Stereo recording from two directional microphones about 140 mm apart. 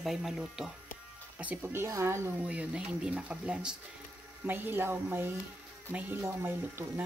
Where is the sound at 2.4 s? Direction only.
10° right (ahead or behind).